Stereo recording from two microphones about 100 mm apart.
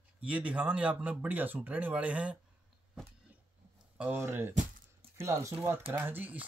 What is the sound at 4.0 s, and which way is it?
Speech, 20° right (ahead or behind).